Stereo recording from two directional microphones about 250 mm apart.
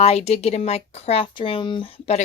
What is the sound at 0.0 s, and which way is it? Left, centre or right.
Speech, left.